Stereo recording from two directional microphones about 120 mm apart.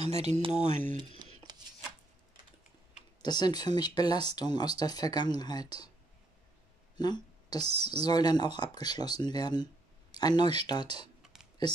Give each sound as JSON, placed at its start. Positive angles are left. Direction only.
{"t": 0.0, "sound": "speech", "side_deg": -65}
{"t": 0.9, "sound": "a sound", "side_deg": -40}
{"t": 3.2, "sound": "speech", "side_deg": 35}
{"t": 7.0, "sound": "speech", "side_deg": 35}